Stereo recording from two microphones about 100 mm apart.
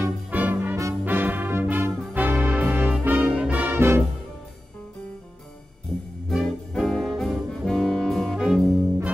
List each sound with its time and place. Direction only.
0.0 s music: 15° right (ahead or behind)
6.2 s brass instrument: 5° left (ahead or behind)